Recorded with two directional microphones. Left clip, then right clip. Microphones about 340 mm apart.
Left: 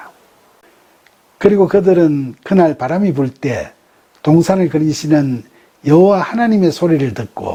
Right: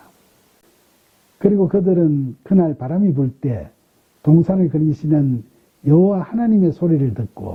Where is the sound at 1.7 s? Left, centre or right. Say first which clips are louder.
Left 6 dB; centre.